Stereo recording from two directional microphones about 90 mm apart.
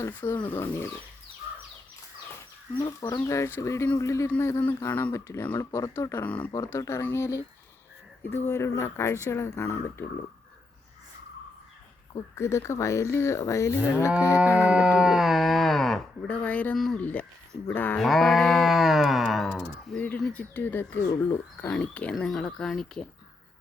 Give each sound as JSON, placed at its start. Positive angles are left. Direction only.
{"t": 0.1, "sound": "speech", "side_deg": 20}
{"t": 2.7, "sound": "speech", "side_deg": 45}
{"t": 3.2, "sound": "speech", "side_deg": 35}
{"t": 6.2, "sound": "speech", "side_deg": 15}
{"t": 6.7, "sound": "speech", "side_deg": 30}
{"t": 12.4, "sound": "speech", "side_deg": 30}
{"t": 14.3, "sound": "livestock", "side_deg": -15}
{"t": 16.2, "sound": "speech", "side_deg": 15}
{"t": 16.7, "sound": "speech", "side_deg": 5}
{"t": 17.0, "sound": "speech", "side_deg": 20}
{"t": 18.0, "sound": "livestock", "side_deg": 0}
{"t": 20.0, "sound": "speech", "side_deg": 20}
{"t": 21.7, "sound": "speech", "side_deg": 15}
{"t": 22.3, "sound": "speech", "side_deg": 5}